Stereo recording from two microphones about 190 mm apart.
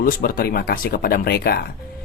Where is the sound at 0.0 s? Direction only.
50° left (ahead or behind).